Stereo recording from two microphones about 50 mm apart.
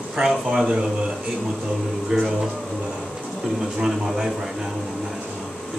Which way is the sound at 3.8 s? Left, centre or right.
Centre.